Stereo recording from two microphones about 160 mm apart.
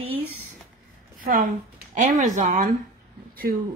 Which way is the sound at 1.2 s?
60° right (ahead or behind).